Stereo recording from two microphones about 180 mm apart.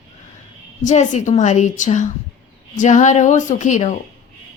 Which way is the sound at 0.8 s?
40° left (ahead or behind).